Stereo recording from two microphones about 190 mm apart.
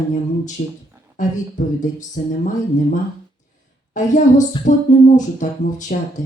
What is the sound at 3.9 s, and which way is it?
Speech, 40° left (ahead or behind).